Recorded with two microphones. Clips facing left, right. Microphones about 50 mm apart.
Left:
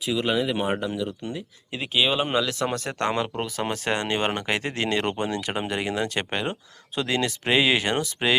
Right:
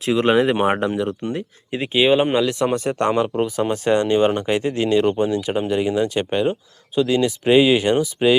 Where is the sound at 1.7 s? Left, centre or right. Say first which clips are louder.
Right 7 dB; right.